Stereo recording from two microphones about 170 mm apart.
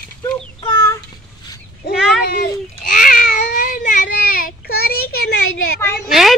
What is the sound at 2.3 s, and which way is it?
Baby cry, 55° left (ahead or behind).